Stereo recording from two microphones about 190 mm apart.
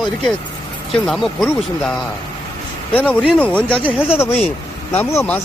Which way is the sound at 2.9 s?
10° left (ahead or behind).